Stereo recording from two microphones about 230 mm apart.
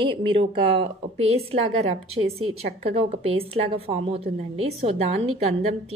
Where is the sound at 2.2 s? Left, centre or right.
Right.